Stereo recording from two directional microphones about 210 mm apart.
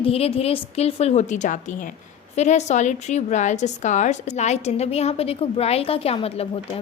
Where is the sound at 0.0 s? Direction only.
25° left (ahead or behind).